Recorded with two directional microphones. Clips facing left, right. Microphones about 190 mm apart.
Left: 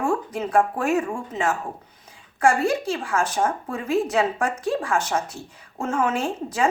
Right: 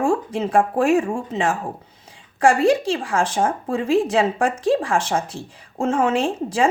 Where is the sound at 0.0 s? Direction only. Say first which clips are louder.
Right 4 dB; 30° right (ahead or behind).